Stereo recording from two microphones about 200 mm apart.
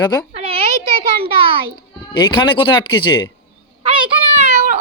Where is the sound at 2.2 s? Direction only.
20° left (ahead or behind).